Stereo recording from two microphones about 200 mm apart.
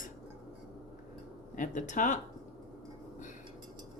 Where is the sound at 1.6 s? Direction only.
40° left (ahead or behind).